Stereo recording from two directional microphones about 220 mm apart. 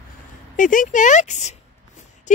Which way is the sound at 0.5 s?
35° left (ahead or behind).